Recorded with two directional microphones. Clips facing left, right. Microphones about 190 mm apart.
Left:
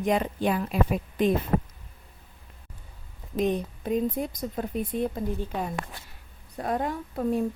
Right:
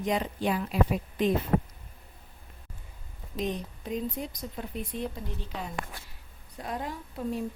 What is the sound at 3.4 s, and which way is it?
Speech, 55° left (ahead or behind).